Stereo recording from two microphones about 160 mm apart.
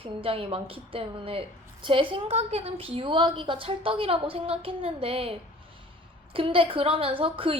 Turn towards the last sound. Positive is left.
turn(degrees=-35)  # may be behind; listen again after turning